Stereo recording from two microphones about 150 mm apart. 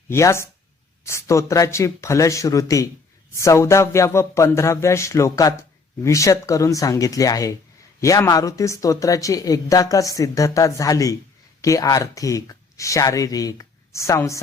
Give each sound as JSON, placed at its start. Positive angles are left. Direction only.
{"t": 0.1, "sound": "speech", "side_deg": 20}